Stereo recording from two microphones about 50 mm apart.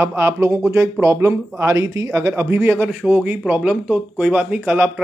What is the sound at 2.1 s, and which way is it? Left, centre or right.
Speech, right.